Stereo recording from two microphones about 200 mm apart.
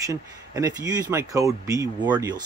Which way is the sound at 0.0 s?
15° right (ahead or behind).